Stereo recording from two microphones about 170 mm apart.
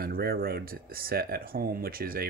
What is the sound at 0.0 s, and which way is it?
Speech, 60° right (ahead or behind).